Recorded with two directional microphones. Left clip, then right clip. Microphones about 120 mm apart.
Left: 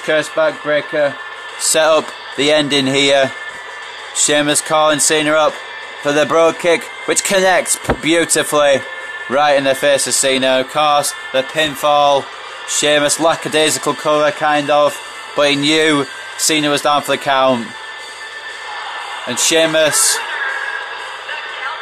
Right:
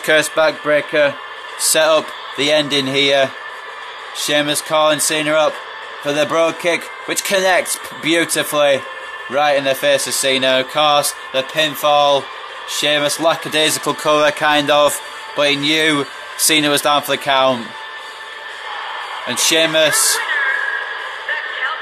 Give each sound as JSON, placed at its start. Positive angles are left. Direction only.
{"t": 0.0, "sound": "speech", "side_deg": 5}
{"t": 1.7, "sound": "speech", "side_deg": 35}
{"t": 14.0, "sound": "speech", "side_deg": 10}
{"t": 15.3, "sound": "speech", "side_deg": 35}
{"t": 16.3, "sound": "speech", "side_deg": 20}
{"t": 19.2, "sound": "speech", "side_deg": 30}